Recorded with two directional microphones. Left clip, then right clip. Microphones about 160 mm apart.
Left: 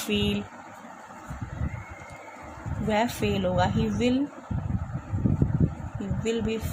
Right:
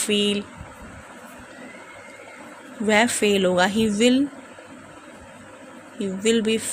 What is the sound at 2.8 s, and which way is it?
Speech, 25° right (ahead or behind).